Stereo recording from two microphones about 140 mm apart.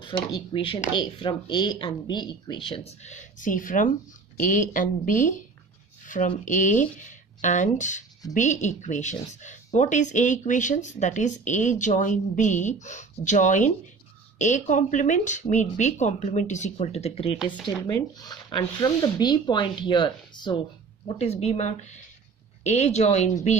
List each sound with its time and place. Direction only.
0.0 s speech: 35° left (ahead or behind); by 5.4 s 65° left (ahead or behind)
6.0 s a sound: 70° left (ahead or behind)
6.4 s speech: 60° left (ahead or behind); by 17.4 s 45° left (ahead or behind)
17.6 s speech: 30° left (ahead or behind)
21.1 s speech: 50° left (ahead or behind)